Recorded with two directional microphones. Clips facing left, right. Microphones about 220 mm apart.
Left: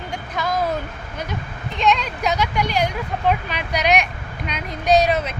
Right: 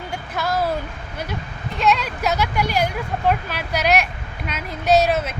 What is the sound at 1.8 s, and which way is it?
Speech, 5° right (ahead or behind).